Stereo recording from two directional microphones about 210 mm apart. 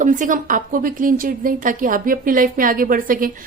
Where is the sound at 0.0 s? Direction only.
40° right (ahead or behind).